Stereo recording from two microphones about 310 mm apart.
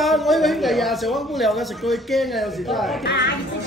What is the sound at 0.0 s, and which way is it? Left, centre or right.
Speech, centre.